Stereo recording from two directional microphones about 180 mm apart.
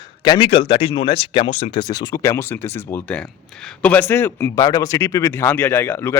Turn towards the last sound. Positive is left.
turn(degrees=15)  # may be behind; listen again after turning